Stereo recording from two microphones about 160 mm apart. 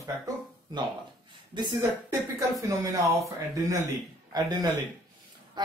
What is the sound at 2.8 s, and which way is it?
Speech, 20° right (ahead or behind).